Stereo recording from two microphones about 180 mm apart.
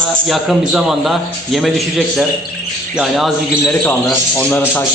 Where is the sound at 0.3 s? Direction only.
Centre (ahead or behind).